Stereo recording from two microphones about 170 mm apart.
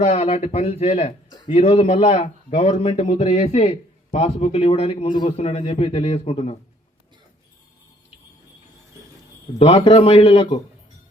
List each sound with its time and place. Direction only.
0.0 s speech: 40° left (ahead or behind)
9.6 s speech: 35° left (ahead or behind)